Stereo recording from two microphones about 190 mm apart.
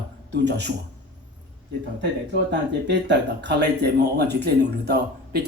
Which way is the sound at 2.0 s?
65° right (ahead or behind).